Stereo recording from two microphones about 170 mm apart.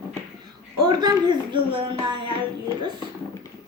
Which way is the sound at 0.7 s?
25° right (ahead or behind).